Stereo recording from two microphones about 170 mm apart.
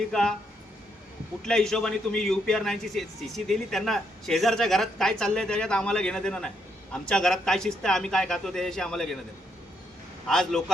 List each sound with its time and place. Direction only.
0.1 s a man's voice: 5° left (ahead or behind)
1.4 s a man's voice: 5° left (ahead or behind)
10.2 s a man's voice: centre (ahead or behind)